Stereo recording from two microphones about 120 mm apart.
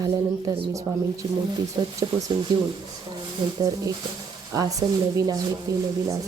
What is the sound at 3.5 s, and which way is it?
A woman's voice, 30° right (ahead or behind).